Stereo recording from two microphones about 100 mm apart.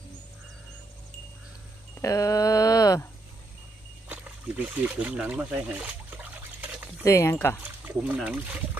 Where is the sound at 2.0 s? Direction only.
35° left (ahead or behind).